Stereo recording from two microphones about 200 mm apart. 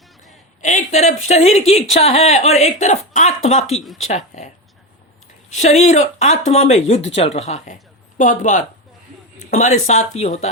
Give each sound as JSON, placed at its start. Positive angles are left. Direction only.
{"t": 0.6, "sound": "speech", "side_deg": 35}
{"t": 5.5, "sound": "speech", "side_deg": 35}